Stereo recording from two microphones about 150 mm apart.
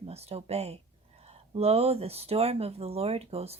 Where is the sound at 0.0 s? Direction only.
45° right (ahead or behind).